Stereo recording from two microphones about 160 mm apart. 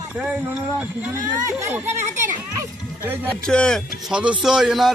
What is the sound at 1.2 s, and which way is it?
Speech, 20° right (ahead or behind).